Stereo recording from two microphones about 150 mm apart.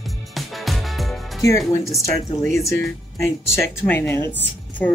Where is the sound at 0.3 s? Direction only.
Centre (ahead or behind).